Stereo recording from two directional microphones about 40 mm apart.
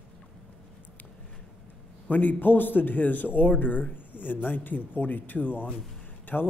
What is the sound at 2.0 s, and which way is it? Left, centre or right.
A man's voice, left.